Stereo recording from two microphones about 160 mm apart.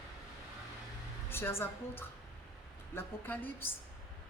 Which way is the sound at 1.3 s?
15° left (ahead or behind).